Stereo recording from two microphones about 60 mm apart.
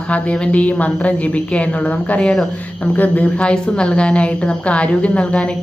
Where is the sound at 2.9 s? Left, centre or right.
Left.